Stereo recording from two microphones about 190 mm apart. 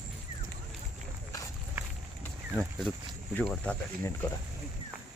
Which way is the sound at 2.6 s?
Centre (ahead or behind).